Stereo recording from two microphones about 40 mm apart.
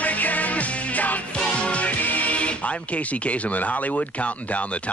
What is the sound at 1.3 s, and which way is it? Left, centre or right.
Speech, left.